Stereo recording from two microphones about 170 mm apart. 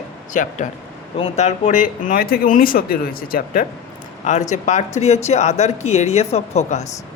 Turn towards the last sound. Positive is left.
turn(degrees=40)  # may be behind; listen again after turning